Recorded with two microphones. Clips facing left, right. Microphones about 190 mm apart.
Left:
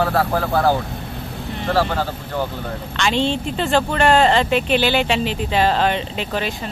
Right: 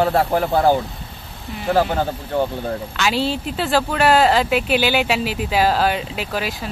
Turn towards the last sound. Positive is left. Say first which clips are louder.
# left 1 dB
turn(degrees=-5)  # may be behind; listen again after turning